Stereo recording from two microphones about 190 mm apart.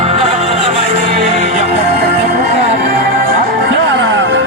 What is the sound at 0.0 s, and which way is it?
Music, 30° right (ahead or behind).